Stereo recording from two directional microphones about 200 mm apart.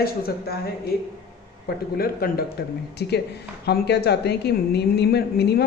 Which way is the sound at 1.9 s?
50° left (ahead or behind).